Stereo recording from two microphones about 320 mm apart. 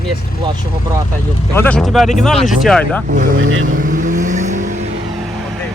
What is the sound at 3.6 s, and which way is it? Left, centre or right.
Vehicle, right.